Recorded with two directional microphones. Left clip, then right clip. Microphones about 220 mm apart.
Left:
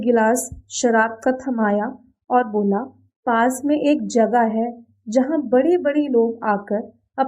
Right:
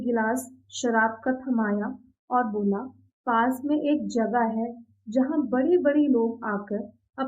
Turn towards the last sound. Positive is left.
turn(degrees=40)  # may be behind; listen again after turning